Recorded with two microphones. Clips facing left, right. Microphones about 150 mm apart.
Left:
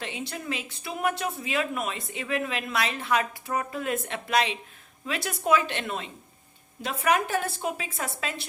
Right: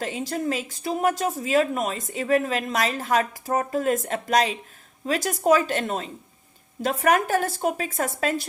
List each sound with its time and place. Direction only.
0.0 s a woman's voice: 40° right (ahead or behind)